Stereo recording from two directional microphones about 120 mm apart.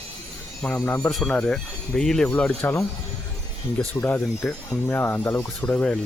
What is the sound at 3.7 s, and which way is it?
Speech, 15° left (ahead or behind).